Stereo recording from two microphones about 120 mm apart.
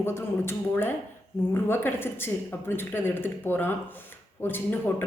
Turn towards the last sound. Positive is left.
turn(degrees=15)  # may be behind; listen again after turning